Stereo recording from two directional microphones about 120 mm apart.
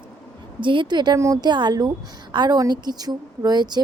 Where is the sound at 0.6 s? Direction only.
40° right (ahead or behind).